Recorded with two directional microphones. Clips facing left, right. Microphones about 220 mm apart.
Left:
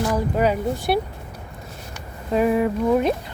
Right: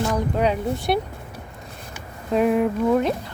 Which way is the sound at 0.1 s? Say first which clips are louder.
Left 1 dB; 5° left (ahead or behind).